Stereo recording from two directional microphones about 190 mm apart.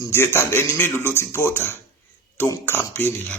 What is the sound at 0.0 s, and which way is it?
Speech, 15° left (ahead or behind).